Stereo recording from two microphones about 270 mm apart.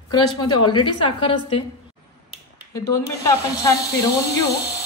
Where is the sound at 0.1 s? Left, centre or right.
Centre.